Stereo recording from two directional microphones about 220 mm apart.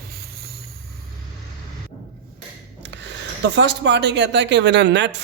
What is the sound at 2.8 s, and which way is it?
Speech, 55° right (ahead or behind).